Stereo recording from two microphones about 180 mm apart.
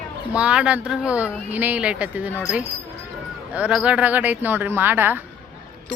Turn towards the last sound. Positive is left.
turn(degrees=-10)  # may be behind; listen again after turning